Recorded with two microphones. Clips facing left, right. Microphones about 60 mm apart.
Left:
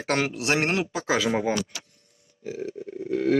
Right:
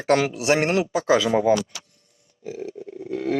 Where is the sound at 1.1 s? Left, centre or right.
Centre.